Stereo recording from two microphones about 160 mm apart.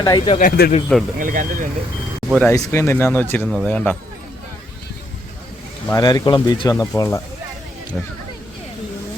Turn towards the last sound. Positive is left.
turn(degrees=20)  # may be behind; listen again after turning